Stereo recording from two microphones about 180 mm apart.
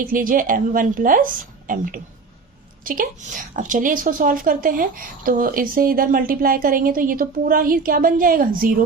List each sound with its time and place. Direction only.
0.0 s a woman's voice: 50° right (ahead or behind)